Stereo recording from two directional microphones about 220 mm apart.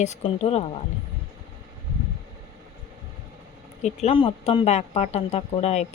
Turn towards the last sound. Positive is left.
turn(degrees=30)  # may be behind; listen again after turning